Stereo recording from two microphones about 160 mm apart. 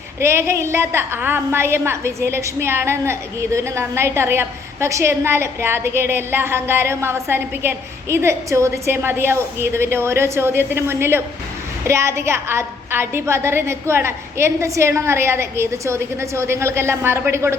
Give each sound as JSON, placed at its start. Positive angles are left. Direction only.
{"t": 0.2, "sound": "a woman's voice", "side_deg": -15}